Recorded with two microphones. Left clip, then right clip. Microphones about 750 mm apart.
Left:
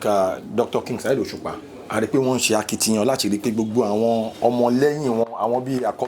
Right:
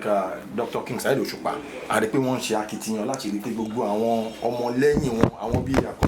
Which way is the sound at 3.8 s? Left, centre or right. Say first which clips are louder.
Left 5 dB; left.